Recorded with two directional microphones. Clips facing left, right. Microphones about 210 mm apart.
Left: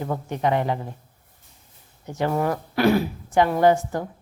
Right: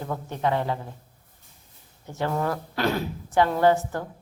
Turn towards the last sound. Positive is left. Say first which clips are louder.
# left 2 dB
turn(degrees=15)  # may be behind; listen again after turning